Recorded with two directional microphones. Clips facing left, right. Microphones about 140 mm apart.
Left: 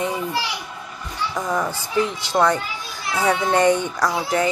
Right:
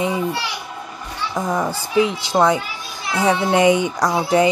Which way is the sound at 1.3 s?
10° right (ahead or behind).